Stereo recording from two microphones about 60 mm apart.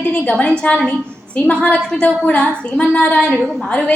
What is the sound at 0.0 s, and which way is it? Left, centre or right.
A woman's voice, left.